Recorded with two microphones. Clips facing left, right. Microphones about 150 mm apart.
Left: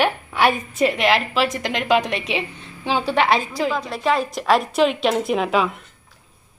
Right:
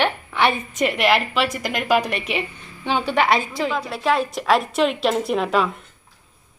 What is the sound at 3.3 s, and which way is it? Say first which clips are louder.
Speech: left 1 dB; 35° left (ahead or behind).